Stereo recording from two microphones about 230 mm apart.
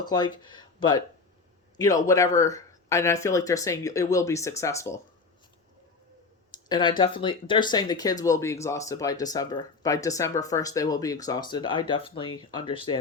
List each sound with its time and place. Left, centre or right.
0.0 s speech: centre
6.5 s a sound: centre
7.0 s speech: left